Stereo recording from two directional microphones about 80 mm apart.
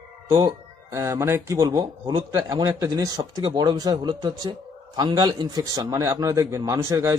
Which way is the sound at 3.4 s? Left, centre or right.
Right.